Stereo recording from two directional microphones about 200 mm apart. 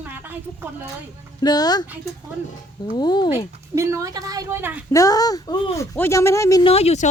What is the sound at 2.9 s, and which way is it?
Speech, 20° left (ahead or behind).